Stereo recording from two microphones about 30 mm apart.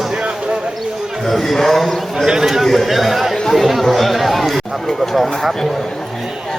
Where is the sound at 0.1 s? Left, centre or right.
Right.